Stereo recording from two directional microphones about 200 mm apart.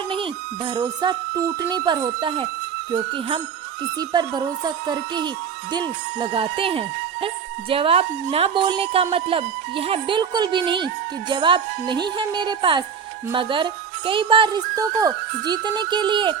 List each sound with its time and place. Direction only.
0.1 s speech: 25° right (ahead or behind)